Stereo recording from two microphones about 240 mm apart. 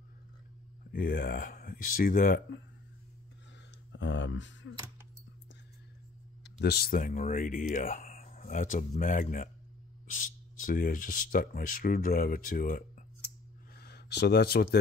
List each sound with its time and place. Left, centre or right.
0.9 s speech: left
4.0 s speech: left
6.6 s speech: left